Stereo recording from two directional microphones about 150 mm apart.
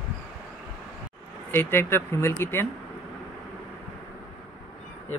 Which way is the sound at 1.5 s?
15° left (ahead or behind).